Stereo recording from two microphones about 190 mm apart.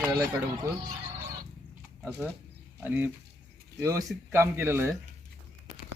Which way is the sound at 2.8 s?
10° right (ahead or behind).